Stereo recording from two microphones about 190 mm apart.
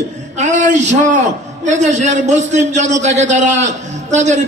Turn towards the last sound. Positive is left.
turn(degrees=-40)  # may be behind; listen again after turning